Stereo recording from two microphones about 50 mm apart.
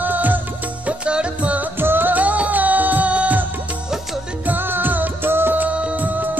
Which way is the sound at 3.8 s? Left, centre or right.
Centre.